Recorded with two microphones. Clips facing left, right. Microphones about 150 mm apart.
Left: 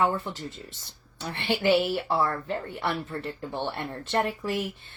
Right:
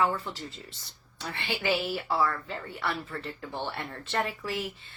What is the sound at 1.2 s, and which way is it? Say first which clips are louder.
A woman's voice: left 6 dB; 65° left (ahead or behind).